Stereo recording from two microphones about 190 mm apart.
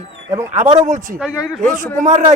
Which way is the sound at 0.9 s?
45° right (ahead or behind).